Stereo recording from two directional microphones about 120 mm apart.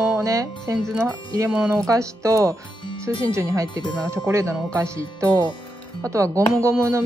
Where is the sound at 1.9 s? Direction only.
25° right (ahead or behind).